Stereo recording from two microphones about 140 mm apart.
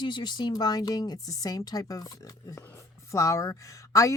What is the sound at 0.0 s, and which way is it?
A woman's voice, 30° left (ahead or behind).